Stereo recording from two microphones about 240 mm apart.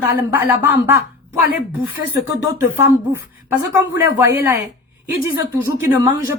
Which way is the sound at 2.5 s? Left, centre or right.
Centre.